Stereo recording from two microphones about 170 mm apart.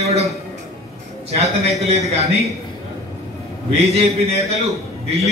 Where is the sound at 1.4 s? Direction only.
35° right (ahead or behind).